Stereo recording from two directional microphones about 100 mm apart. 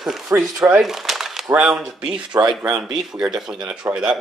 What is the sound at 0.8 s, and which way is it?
Crumpling, 5° right (ahead or behind).